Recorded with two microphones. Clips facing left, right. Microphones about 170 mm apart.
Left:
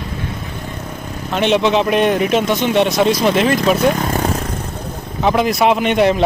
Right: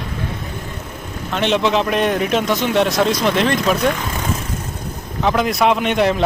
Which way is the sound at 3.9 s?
40° left (ahead or behind).